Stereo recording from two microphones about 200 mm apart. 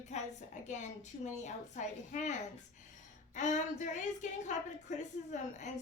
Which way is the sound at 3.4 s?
35° left (ahead or behind).